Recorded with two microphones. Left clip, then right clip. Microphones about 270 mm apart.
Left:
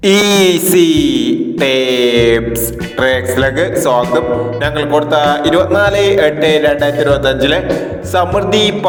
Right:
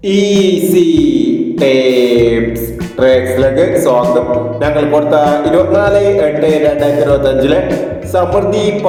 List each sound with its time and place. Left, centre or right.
0.5 s music: left
3.0 s music: left
6.1 s speech: left